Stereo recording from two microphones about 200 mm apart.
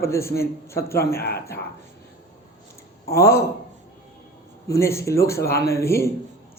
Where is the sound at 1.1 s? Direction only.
50° left (ahead or behind).